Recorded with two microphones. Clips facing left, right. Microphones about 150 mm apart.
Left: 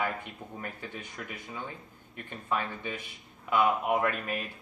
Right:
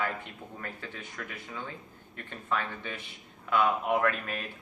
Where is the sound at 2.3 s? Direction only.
15° left (ahead or behind).